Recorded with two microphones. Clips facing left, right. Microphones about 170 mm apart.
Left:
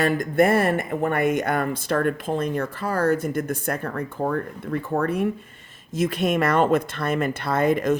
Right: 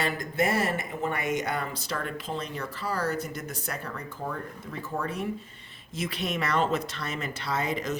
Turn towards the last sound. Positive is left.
turn(degrees=55)  # may be behind; listen again after turning